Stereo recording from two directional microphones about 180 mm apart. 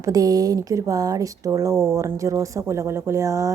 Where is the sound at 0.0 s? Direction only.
20° right (ahead or behind).